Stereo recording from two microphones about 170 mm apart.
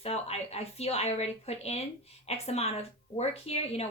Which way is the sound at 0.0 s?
40° left (ahead or behind).